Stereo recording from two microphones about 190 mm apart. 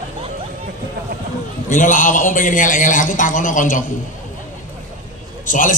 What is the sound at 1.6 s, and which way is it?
A woman's voice, 40° left (ahead or behind).